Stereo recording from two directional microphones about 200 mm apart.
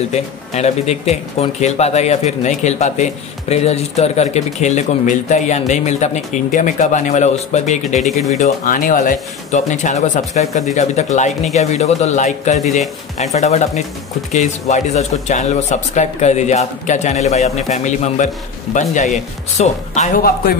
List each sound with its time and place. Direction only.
0.1 s speech: 35° left (ahead or behind)